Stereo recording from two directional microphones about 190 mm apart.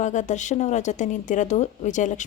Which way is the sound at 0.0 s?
40° left (ahead or behind).